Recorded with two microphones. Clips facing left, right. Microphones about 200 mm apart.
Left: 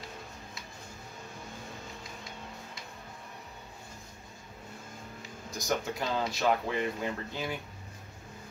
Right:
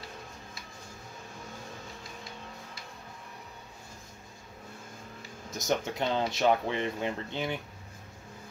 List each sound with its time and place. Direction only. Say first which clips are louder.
5.5 s speech: right 2 dB; 20° right (ahead or behind)